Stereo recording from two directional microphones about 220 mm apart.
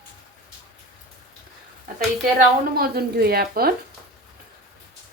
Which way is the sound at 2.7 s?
45° right (ahead or behind).